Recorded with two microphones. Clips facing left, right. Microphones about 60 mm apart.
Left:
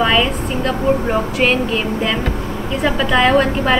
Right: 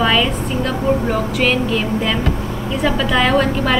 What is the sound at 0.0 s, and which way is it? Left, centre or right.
A woman's voice, centre.